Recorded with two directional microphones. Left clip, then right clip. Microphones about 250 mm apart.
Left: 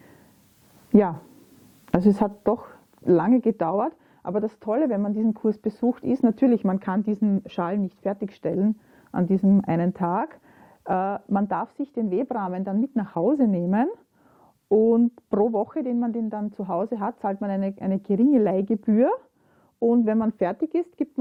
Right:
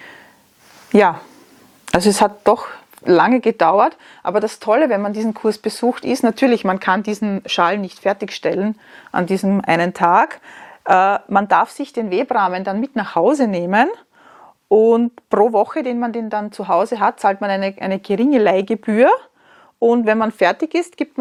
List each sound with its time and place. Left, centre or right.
0.9 s speech: centre